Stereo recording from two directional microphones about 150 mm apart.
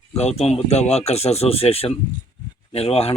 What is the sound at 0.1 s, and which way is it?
Speech, 45° left (ahead or behind).